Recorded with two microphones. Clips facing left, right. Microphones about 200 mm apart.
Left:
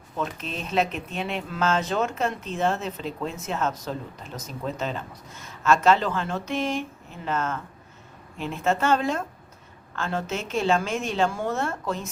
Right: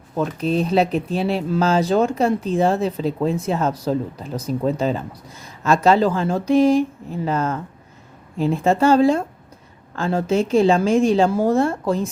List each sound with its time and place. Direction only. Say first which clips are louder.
0.3 s speech: right 9 dB; 35° right (ahead or behind)